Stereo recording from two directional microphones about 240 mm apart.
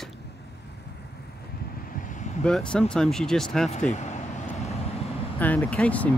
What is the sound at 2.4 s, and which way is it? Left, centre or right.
Speech, centre.